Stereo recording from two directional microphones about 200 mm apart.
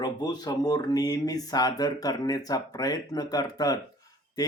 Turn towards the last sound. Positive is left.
turn(degrees=20)  # may be behind; listen again after turning